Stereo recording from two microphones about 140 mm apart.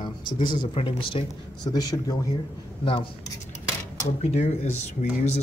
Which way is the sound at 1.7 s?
25° left (ahead or behind).